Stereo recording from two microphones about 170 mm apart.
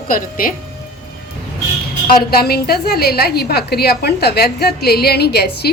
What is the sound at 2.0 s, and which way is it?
A woman's voice, 65° left (ahead or behind).